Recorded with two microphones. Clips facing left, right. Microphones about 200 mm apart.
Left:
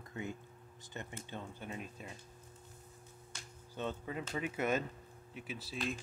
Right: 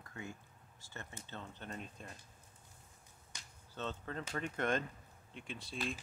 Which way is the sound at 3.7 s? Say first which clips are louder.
Left 3 dB; 10° left (ahead or behind).